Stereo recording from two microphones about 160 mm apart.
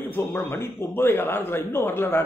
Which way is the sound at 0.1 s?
15° left (ahead or behind).